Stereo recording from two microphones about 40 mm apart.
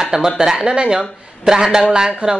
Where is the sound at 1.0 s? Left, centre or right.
Centre.